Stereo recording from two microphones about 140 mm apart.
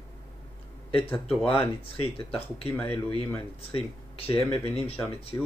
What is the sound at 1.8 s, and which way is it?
Speech, 40° left (ahead or behind).